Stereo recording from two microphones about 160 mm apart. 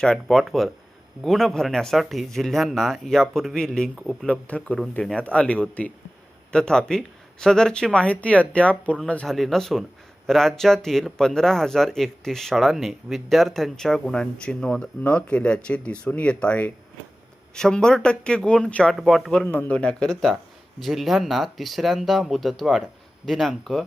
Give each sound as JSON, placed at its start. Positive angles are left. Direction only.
{"t": 0.0, "sound": "speech", "side_deg": 5}